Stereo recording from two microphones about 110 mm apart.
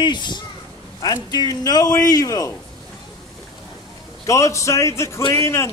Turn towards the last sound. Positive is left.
turn(degrees=25)  # may be behind; listen again after turning